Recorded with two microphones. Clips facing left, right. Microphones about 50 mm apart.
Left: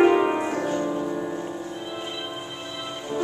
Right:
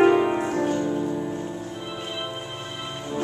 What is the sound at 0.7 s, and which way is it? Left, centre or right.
Music, left.